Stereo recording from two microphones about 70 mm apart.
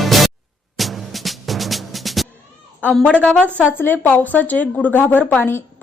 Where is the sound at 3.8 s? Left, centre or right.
Left.